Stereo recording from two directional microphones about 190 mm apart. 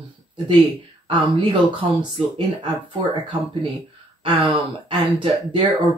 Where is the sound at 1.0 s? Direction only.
25° right (ahead or behind).